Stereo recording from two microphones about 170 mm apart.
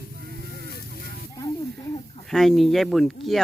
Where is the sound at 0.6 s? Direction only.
65° left (ahead or behind).